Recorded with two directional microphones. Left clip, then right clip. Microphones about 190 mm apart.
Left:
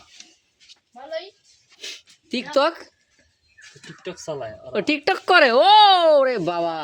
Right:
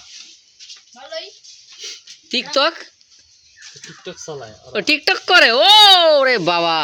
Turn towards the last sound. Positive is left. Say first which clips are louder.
# right 7 dB
turn(degrees=-15)  # may be behind; listen again after turning